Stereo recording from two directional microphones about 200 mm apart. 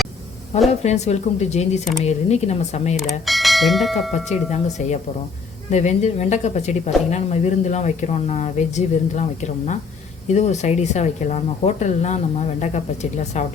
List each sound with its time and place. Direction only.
0.7 s speech: 35° left (ahead or behind)
3.1 s speech: centre (ahead or behind)
4.5 s speech: 35° left (ahead or behind)